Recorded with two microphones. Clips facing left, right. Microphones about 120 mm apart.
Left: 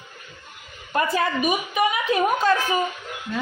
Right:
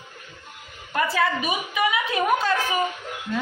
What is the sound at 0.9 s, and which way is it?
Speech, 25° left (ahead or behind).